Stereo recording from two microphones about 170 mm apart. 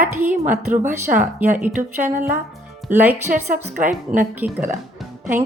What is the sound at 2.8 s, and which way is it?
Speech, 10° right (ahead or behind).